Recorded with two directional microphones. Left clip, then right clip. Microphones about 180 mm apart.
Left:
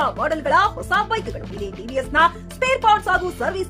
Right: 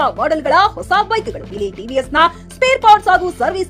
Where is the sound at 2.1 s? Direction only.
20° right (ahead or behind).